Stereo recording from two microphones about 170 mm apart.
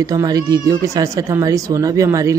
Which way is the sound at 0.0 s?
20° right (ahead or behind).